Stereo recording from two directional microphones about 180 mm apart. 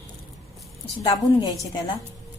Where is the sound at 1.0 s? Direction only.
20° left (ahead or behind).